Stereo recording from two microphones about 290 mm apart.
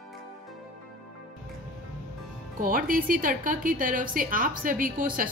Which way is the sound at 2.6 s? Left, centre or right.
Right.